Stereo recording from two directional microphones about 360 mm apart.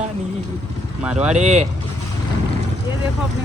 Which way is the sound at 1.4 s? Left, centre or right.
Centre.